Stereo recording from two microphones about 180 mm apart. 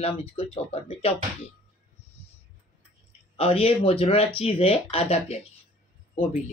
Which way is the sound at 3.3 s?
35° left (ahead or behind).